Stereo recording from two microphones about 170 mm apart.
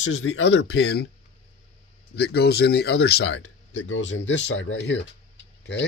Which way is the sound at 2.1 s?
70° left (ahead or behind).